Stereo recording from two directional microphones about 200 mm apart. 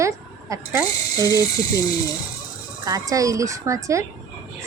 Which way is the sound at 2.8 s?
15° right (ahead or behind).